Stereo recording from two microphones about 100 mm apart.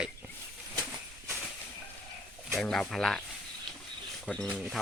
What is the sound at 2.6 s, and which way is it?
Speech, 5° left (ahead or behind).